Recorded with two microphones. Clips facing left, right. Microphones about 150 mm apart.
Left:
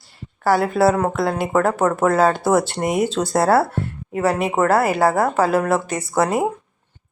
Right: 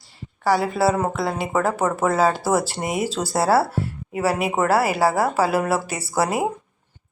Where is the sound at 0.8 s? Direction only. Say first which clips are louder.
Left 3 dB; centre (ahead or behind).